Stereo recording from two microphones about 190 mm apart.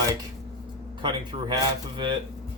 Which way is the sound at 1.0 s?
25° right (ahead or behind).